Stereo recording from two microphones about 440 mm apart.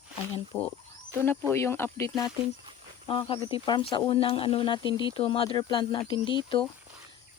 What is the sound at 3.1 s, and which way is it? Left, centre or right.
Speech, centre.